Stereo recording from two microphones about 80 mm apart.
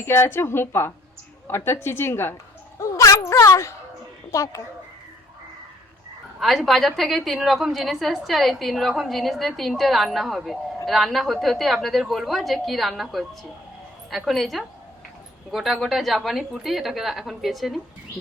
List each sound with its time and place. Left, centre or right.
0.0 s a woman's voice: left
2.7 s a sound: left
4.3 s a woman's voice: left
6.4 s a woman's voice: centre
14.3 s a woman's voice: centre